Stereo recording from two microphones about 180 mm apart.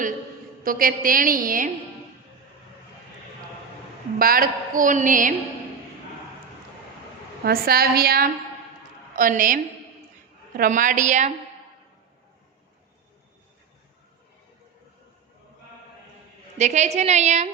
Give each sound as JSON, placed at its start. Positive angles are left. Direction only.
{"t": 0.6, "sound": "a woman's voice", "side_deg": -50}
{"t": 4.2, "sound": "a woman's voice", "side_deg": -55}
{"t": 7.4, "sound": "a woman's voice", "side_deg": -55}
{"t": 10.6, "sound": "a woman's voice", "side_deg": -45}
{"t": 16.6, "sound": "a woman's voice", "side_deg": -40}